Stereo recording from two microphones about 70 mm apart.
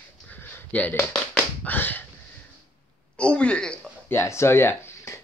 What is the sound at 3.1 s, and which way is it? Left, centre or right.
Speech, centre.